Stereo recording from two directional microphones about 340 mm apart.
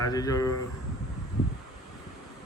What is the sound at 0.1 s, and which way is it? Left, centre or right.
Speech, centre.